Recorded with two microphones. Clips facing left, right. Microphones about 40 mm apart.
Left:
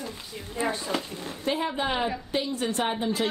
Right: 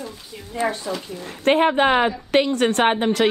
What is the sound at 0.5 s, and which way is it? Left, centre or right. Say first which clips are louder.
A woman's voice: right 4 dB; right.